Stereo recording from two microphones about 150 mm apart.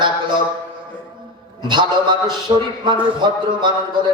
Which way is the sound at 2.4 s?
30° right (ahead or behind).